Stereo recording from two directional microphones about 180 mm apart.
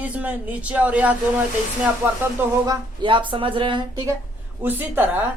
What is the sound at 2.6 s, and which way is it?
Speech, 25° right (ahead or behind).